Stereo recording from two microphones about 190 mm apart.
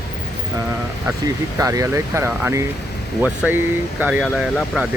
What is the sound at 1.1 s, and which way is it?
Speech, 15° right (ahead or behind).